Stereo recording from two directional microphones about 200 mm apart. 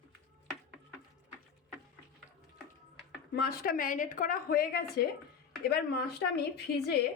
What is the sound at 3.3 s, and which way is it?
Speech, 45° left (ahead or behind).